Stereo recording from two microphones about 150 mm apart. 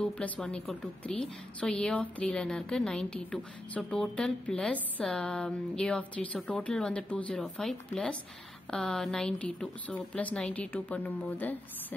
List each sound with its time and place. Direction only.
0.0 s a woman's voice: 5° left (ahead or behind)